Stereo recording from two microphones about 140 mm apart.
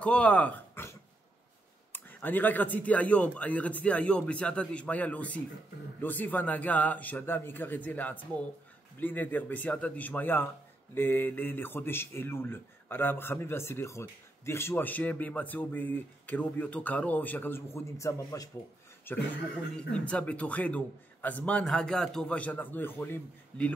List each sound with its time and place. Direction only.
0.0 s a man's voice: 10° left (ahead or behind)